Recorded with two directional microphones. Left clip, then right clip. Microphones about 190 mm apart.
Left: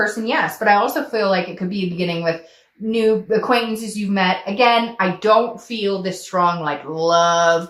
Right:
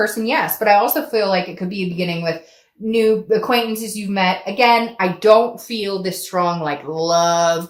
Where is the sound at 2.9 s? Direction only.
35° right (ahead or behind).